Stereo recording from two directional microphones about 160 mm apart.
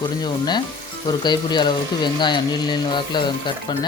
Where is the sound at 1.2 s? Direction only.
30° left (ahead or behind).